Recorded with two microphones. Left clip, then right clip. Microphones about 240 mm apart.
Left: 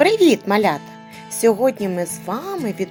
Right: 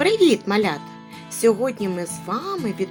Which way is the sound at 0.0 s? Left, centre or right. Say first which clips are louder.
Left 3 dB; left.